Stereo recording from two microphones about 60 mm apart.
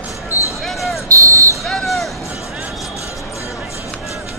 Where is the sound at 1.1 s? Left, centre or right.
Right.